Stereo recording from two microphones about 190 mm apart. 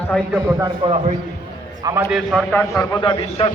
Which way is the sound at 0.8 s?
30° right (ahead or behind).